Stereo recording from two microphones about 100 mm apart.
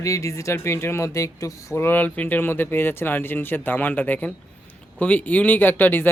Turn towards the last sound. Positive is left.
turn(degrees=20)  # may be behind; listen again after turning